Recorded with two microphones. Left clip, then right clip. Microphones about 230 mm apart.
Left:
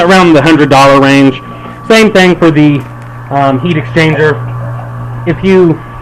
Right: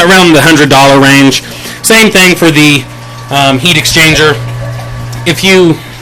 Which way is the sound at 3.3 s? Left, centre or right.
Right.